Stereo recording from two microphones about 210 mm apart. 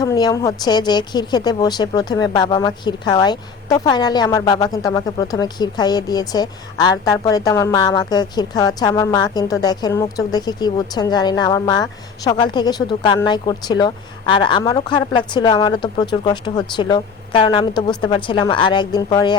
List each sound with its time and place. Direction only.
0.0 s speech: 20° left (ahead or behind)